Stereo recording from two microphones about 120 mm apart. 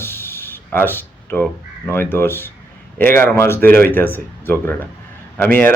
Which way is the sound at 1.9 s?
20° left (ahead or behind).